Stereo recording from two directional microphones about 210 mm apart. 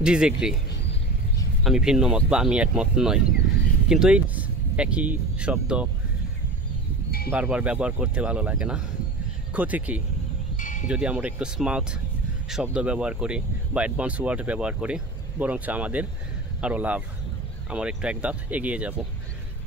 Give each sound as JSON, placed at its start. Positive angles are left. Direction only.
{"t": 0.0, "sound": "speech", "side_deg": -5}
{"t": 1.6, "sound": "speech", "side_deg": 0}
{"t": 7.2, "sound": "speech", "side_deg": -10}
{"t": 10.6, "sound": "wind chime", "side_deg": 40}
{"t": 10.9, "sound": "speech", "side_deg": -5}